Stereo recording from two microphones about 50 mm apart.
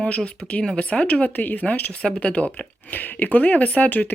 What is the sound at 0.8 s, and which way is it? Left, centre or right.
Speech, left.